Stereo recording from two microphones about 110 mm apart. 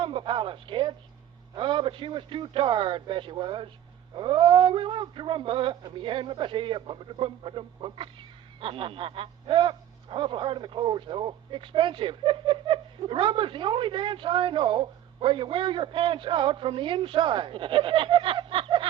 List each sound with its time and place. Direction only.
0.0 s radio: 50° right (ahead or behind)
1.5 s speech: 50° right (ahead or behind)